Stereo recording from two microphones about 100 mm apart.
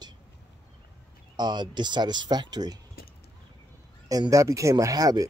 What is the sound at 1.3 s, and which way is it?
Speech, 45° right (ahead or behind).